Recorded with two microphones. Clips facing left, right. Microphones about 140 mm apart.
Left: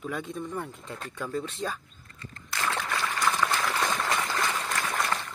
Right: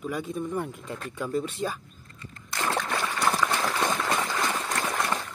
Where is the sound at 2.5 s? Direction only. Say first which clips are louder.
Right 2 dB; 25° right (ahead or behind).